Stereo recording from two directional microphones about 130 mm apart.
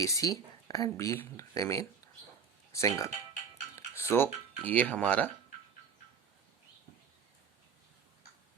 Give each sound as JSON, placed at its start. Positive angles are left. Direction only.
{"t": 0.0, "sound": "speech", "side_deg": 25}